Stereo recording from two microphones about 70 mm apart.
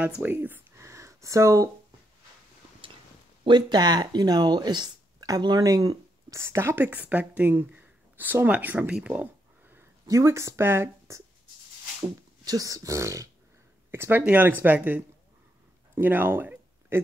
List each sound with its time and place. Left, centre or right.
0.2 s speech: right
0.7 s a sound: right
3.4 s speech: right
6.4 s speech: right
10.0 s speech: right
12.4 s speech: right
13.8 s speech: right
15.9 s a sound: right